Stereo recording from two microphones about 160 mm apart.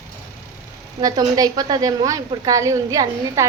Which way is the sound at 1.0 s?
25° right (ahead or behind).